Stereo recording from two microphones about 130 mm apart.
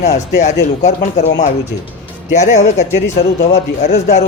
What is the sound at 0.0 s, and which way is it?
Speech, 60° left (ahead or behind).